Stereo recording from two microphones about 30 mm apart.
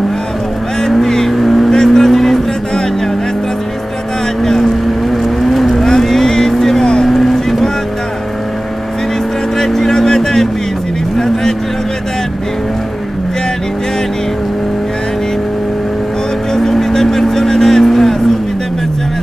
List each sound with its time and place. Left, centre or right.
0.9 s vehicle: centre
1.7 s vehicle: centre
2.0 s music: centre
4.4 s vehicle: centre
5.1 s vehicle: centre
5.8 s vehicle: centre
7.1 s vehicle: centre
9.8 s vehicle: centre
16.5 s vehicle: centre